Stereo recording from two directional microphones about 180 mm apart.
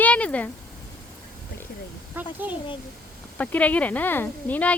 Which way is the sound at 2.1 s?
10° right (ahead or behind).